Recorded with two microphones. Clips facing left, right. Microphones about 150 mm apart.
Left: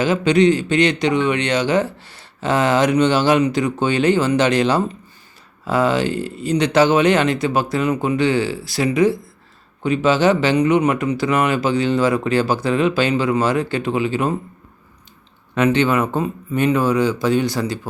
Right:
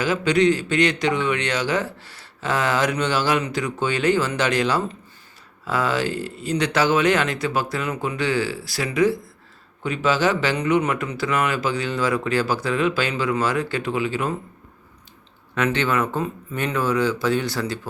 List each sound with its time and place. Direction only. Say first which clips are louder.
0.0 s a man's voice: left 4 dB; 25° left (ahead or behind)
15.5 s speech: left 5 dB; 20° left (ahead or behind)